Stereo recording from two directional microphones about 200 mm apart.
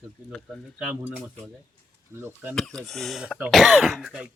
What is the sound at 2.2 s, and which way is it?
Speech, 10° right (ahead or behind).